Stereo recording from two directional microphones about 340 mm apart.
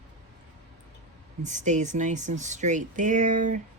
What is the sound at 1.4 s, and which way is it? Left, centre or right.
Speech, right.